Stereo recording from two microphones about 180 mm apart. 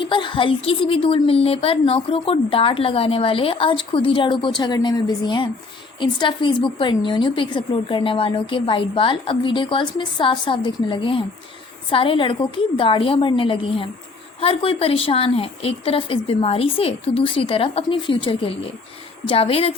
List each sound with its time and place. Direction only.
0.0 s a woman's voice: 25° left (ahead or behind)